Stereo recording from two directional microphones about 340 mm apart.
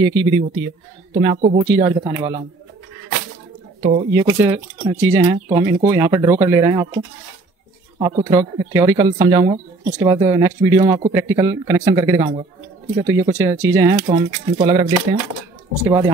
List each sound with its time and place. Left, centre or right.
0.0 s speech: centre
3.8 s speech: centre
4.1 s speech: centre
8.0 s speech: centre